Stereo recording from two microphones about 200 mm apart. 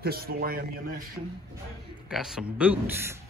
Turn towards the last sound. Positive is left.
turn(degrees=-5)  # may be behind; listen again after turning